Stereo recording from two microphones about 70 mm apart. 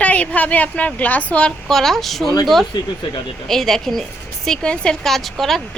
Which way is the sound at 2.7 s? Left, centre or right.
Left.